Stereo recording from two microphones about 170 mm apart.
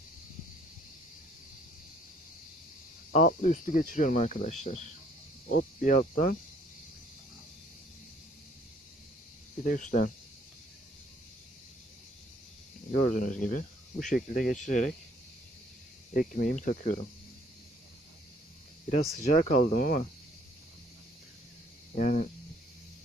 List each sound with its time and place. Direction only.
3.1 s speech: 45° left (ahead or behind)
9.6 s speech: 50° left (ahead or behind)
12.9 s speech: 50° left (ahead or behind)
16.1 s speech: 55° left (ahead or behind)
19.1 s speech: 45° left (ahead or behind)
21.9 s speech: 45° left (ahead or behind)